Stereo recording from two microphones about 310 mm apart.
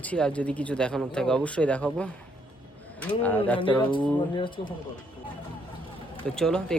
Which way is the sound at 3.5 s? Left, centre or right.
Centre.